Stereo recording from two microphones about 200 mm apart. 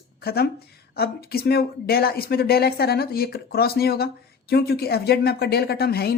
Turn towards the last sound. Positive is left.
turn(degrees=50)  # may be behind; listen again after turning